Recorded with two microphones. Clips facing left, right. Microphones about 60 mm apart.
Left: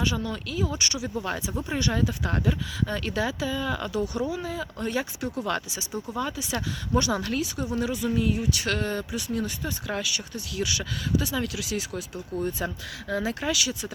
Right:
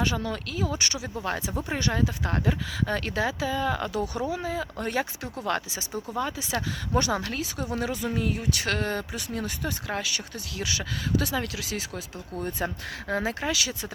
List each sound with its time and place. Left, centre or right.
0.0 s speech: right